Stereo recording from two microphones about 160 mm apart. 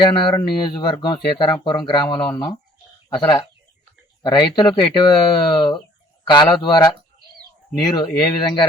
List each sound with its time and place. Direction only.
0.0 s speech: 30° left (ahead or behind)